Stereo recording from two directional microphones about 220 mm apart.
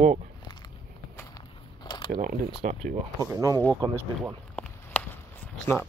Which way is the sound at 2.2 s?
40° right (ahead or behind).